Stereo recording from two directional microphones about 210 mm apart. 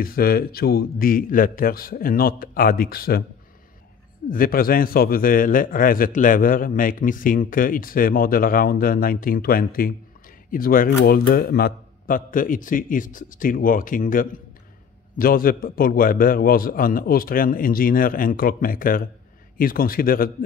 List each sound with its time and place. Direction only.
0.0 s a man's voice: 45° left (ahead or behind)
4.3 s a man's voice: 45° left (ahead or behind)